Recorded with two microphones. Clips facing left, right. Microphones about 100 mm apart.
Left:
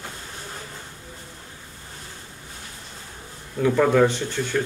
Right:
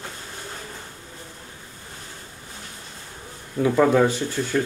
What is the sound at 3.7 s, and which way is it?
Speech, 15° right (ahead or behind).